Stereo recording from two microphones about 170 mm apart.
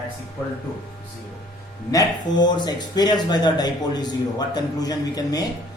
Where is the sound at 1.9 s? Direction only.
20° left (ahead or behind).